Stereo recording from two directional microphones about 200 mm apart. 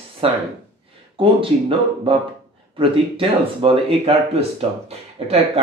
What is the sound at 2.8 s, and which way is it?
Speech, 25° right (ahead or behind).